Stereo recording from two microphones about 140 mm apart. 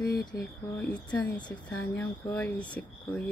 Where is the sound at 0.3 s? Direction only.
20° left (ahead or behind).